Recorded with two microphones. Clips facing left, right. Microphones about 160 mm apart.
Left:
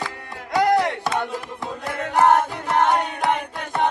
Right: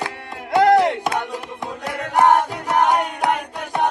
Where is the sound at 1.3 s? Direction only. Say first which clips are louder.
Right 1 dB; 20° right (ahead or behind).